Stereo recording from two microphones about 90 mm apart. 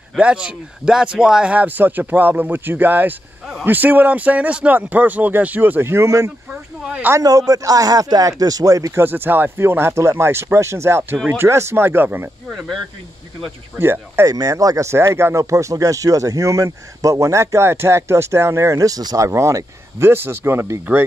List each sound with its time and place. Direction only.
0.2 s a man's voice: 10° right (ahead or behind); by 6.3 s 35° right (ahead or behind)
6.5 s a sound: 10° right (ahead or behind)
7.2 s speech: 40° right (ahead or behind)
8.9 s a man's voice: 25° right (ahead or behind)
12.4 s speech: centre (ahead or behind)
13.7 s a man's voice: 25° right (ahead or behind)
14.3 s speech: 40° right (ahead or behind)